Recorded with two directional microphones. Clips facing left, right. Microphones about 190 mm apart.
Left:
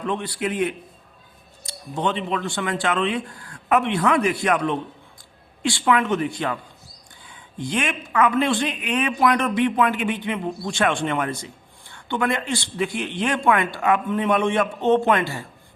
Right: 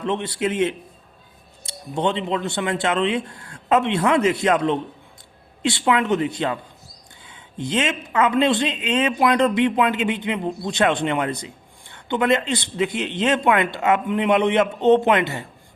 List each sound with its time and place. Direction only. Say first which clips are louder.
0.0 s a woman's voice: right 2 dB; 25° right (ahead or behind)
1.7 s a sound: right 1 dB; 25° right (ahead or behind)
2.0 s a woman's voice: right 2 dB; 25° right (ahead or behind)